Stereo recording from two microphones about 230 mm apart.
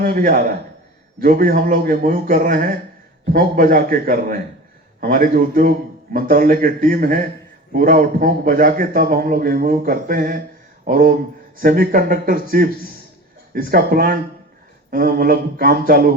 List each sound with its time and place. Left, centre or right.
0.0 s a man's voice: right